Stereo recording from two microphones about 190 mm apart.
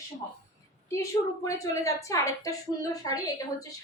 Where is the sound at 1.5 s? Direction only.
15° left (ahead or behind).